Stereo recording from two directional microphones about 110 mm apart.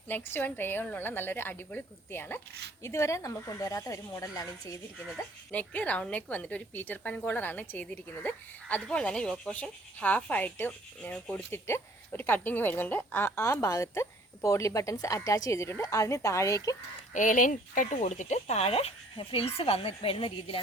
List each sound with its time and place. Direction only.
0.1 s speech: 20° left (ahead or behind); by 4.8 s 35° left (ahead or behind)
5.5 s a woman's voice: 15° left (ahead or behind); by 16.7 s 30° left (ahead or behind)
17.1 s speech: 90° left; by 20.6 s 55° left (ahead or behind)